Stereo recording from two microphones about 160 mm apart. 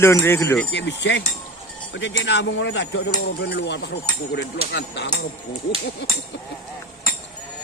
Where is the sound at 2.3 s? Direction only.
90° left.